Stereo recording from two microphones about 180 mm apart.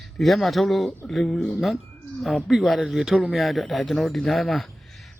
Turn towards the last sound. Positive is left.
turn(degrees=0)  # may be behind; listen again after turning